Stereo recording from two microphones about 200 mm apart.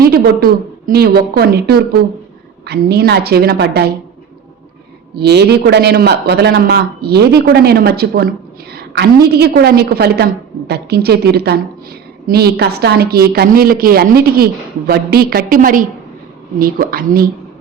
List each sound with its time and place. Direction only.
0.0 s a woman's voice: 50° right (ahead or behind)
5.1 s a woman's voice: 55° right (ahead or behind)